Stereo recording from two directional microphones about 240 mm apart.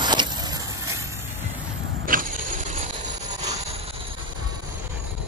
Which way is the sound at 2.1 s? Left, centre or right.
Right.